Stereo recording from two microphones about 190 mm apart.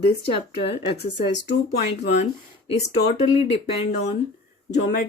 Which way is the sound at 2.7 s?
35° left (ahead or behind).